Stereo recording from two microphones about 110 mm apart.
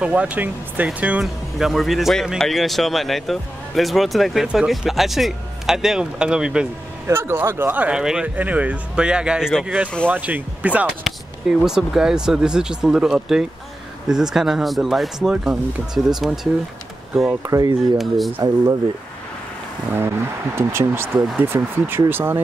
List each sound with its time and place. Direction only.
0.0 s speech: 10° right (ahead or behind)
1.2 s speech: centre (ahead or behind)
7.1 s speech: 20° right (ahead or behind); by 9.7 s 5° right (ahead or behind)
10.0 s speech: 15° right (ahead or behind)
17.5 s speech: 35° right (ahead or behind)
17.9 s speech: centre (ahead or behind)
19.9 s speech: 20° right (ahead or behind)